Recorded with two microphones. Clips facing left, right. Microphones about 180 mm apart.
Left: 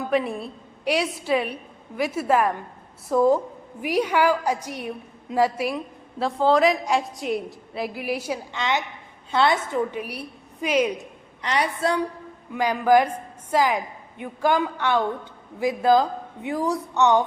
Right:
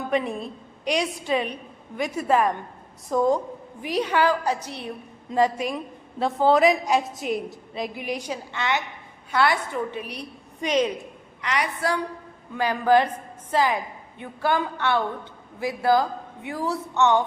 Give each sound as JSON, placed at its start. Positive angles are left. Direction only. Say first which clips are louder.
{"t": 0.1, "sound": "a woman's voice", "louder": "left 1 dB", "side_deg": 5}
{"t": 11.4, "sound": "a woman's voice", "louder": "left 2 dB", "side_deg": 30}
{"t": 12.5, "sound": "a woman's voice", "louder": "left 1 dB", "side_deg": 10}